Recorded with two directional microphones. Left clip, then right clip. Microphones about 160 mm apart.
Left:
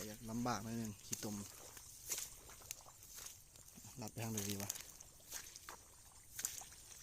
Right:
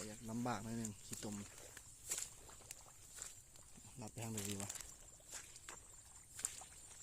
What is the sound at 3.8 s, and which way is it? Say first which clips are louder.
Speech: left 3 dB; 20° left (ahead or behind).